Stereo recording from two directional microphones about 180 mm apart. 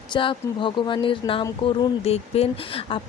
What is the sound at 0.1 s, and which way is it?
Speech, 30° left (ahead or behind).